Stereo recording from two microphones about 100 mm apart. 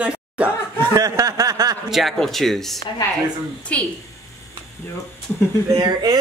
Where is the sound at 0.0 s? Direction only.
10° right (ahead or behind).